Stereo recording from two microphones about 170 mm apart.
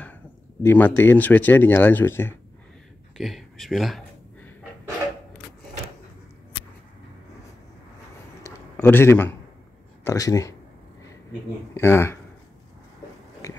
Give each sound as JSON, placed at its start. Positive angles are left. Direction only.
{"t": 0.0, "sound": "speech", "side_deg": 10}
{"t": 3.2, "sound": "speech", "side_deg": 0}
{"t": 8.4, "sound": "a sound", "side_deg": 15}
{"t": 10.0, "sound": "speech", "side_deg": 20}
{"t": 11.7, "sound": "speech", "side_deg": 15}
{"t": 13.4, "sound": "a sound", "side_deg": 20}